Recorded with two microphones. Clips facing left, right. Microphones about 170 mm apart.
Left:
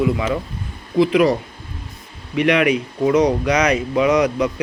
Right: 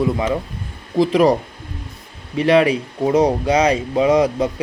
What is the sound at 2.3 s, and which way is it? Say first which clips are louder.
Speech: right 2 dB; 30° right (ahead or behind).